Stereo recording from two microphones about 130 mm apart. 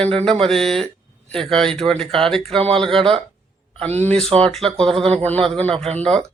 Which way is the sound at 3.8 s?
55° right (ahead or behind).